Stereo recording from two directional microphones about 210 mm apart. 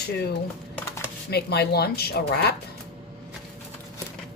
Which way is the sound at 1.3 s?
50° left (ahead or behind).